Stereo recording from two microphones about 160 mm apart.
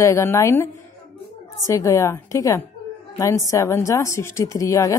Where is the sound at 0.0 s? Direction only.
20° left (ahead or behind).